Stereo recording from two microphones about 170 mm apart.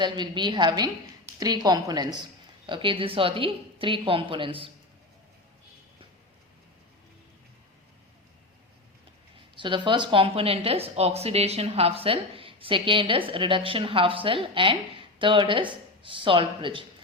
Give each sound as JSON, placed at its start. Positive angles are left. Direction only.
{"t": 0.0, "sound": "a woman's voice", "side_deg": -25}
{"t": 9.6, "sound": "a woman's voice", "side_deg": -30}